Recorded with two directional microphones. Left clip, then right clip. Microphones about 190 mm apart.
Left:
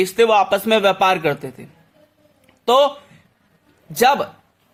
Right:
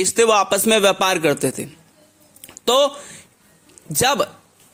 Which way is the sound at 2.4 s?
40° right (ahead or behind).